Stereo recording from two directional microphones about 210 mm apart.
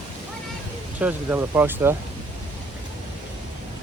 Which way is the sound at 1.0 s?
10° right (ahead or behind).